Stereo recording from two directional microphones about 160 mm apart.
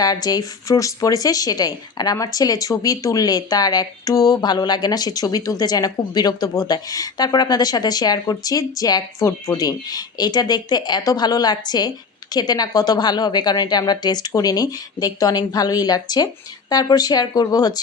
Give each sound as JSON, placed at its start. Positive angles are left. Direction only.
{"t": 0.0, "sound": "speech", "side_deg": 25}